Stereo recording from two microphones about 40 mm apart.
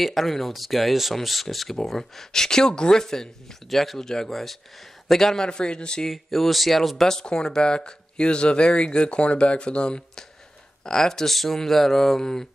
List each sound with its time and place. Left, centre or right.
0.0 s speech: centre; by 6.0 s left
6.0 s speech: centre
7.1 s speech: centre
10.8 s speech: centre